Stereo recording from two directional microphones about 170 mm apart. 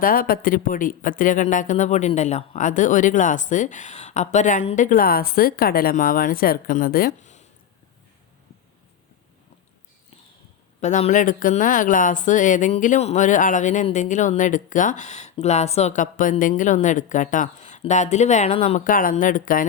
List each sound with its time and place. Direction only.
0.0 s speech: 55° left (ahead or behind)
10.8 s speech: 45° left (ahead or behind)
18.9 s speech: 55° left (ahead or behind)